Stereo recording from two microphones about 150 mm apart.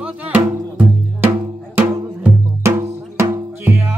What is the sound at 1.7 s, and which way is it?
Drum, 15° right (ahead or behind).